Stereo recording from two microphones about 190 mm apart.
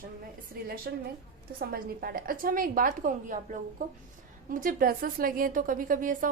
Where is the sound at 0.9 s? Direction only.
55° right (ahead or behind).